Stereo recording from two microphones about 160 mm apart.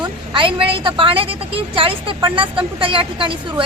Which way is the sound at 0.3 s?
35° right (ahead or behind).